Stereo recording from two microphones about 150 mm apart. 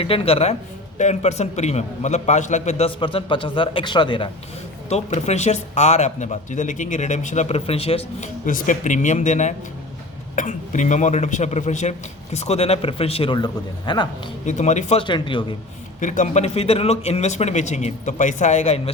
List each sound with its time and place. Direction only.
0.0 s a man's voice: 40° left (ahead or behind)
4.9 s a man's voice: 45° left (ahead or behind)
8.4 s a man's voice: 60° left (ahead or behind); by 14.1 s 30° left (ahead or behind)
14.4 s a man's voice: 50° left (ahead or behind)
15.0 s speech: 35° left (ahead or behind)
16.0 s a man's voice: 55° left (ahead or behind)